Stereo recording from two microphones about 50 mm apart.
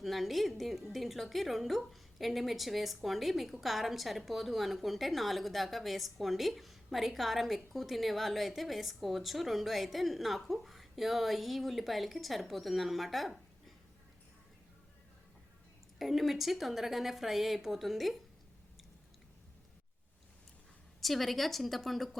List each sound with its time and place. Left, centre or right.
0.0 s a woman's voice: centre
16.0 s a woman's voice: centre
21.0 s a woman's voice: centre